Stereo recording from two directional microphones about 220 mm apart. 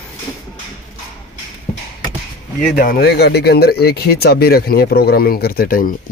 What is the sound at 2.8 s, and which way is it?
Speech, 40° left (ahead or behind).